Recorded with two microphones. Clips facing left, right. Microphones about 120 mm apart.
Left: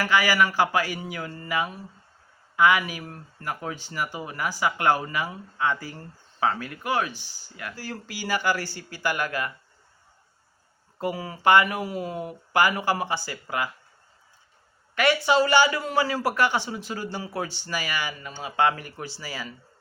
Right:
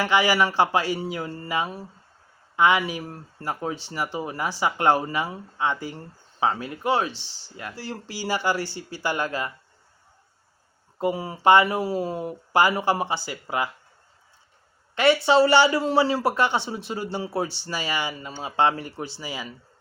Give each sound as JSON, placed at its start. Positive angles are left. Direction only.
{"t": 0.0, "sound": "speech", "side_deg": -20}
{"t": 7.1, "sound": "speech", "side_deg": -75}
{"t": 7.5, "sound": "speech", "side_deg": -30}
{"t": 11.0, "sound": "speech", "side_deg": -25}
{"t": 15.0, "sound": "speech", "side_deg": -25}